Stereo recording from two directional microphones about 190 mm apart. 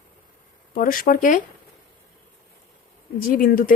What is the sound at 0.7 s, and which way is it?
Speech, 45° left (ahead or behind).